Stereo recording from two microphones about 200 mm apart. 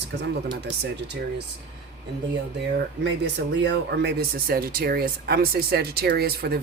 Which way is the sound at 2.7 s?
60° right (ahead or behind).